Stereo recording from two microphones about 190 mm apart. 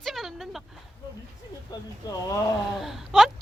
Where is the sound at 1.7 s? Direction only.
20° left (ahead or behind).